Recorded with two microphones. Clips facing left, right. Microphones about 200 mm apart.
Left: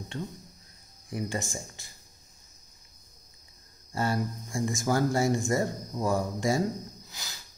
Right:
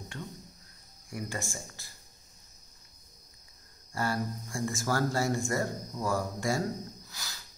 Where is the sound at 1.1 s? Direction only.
20° left (ahead or behind).